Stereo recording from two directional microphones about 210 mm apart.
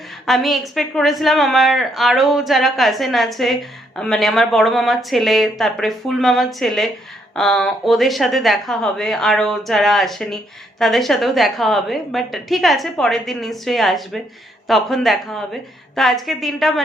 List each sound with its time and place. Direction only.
0.3 s a woman's voice: centre (ahead or behind)